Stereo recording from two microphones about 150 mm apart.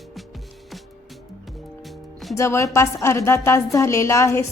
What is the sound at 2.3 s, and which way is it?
A woman's voice, 20° left (ahead or behind).